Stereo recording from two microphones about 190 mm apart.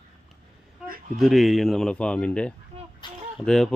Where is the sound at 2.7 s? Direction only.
30° right (ahead or behind).